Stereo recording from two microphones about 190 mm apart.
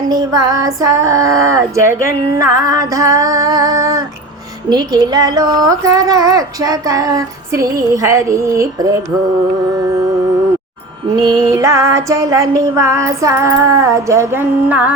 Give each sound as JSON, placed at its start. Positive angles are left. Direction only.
{"t": 0.1, "sound": "speech", "side_deg": -20}
{"t": 8.0, "sound": "music", "side_deg": -15}
{"t": 11.2, "sound": "music", "side_deg": -20}